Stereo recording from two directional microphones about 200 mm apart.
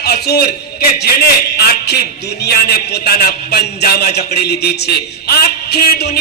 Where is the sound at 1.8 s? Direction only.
55° left (ahead or behind).